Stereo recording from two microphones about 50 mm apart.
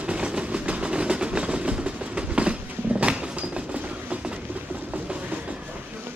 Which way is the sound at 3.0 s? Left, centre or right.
Centre.